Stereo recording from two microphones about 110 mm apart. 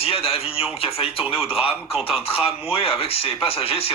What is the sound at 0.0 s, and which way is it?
Speech, 60° left (ahead or behind).